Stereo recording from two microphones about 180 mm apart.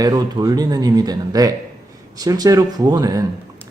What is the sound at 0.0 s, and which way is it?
A man's voice, 20° right (ahead or behind).